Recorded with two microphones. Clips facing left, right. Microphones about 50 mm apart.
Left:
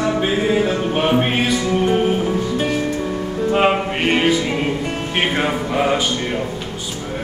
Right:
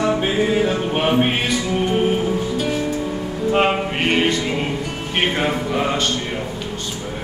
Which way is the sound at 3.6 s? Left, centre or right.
Centre.